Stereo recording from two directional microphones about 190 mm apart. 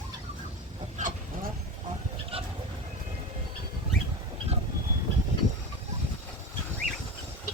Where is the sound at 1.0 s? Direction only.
45° right (ahead or behind).